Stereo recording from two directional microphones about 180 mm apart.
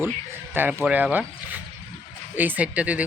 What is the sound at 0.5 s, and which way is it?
Speech, 10° right (ahead or behind).